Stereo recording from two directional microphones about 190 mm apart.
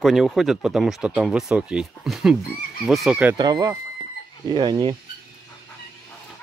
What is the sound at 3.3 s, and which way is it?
Speech, 20° right (ahead or behind).